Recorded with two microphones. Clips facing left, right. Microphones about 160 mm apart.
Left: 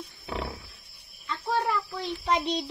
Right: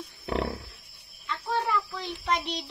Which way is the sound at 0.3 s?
75° right (ahead or behind).